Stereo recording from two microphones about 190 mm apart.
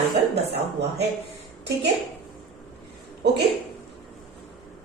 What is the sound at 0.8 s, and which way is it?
Speech, 65° right (ahead or behind).